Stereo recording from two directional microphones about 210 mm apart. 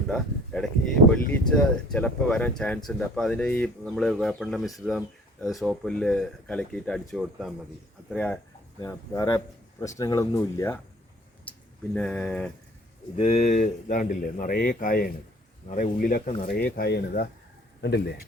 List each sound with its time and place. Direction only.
0.1 s speech: 5° left (ahead or behind)
11.9 s speech: 5° left (ahead or behind)
13.1 s a man's voice: 30° left (ahead or behind); by 18.1 s 55° left (ahead or behind)